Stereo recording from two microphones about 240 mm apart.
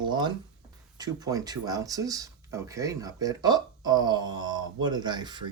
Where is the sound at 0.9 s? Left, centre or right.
Centre.